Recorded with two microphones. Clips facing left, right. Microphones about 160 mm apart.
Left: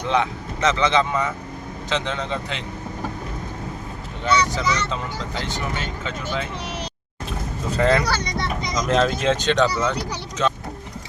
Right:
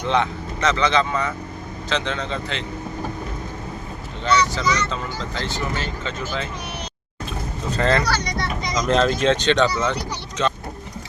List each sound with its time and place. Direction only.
0.1 s speech: 15° left (ahead or behind)
4.3 s speech: 15° left (ahead or behind)
7.7 s speech: 10° left (ahead or behind)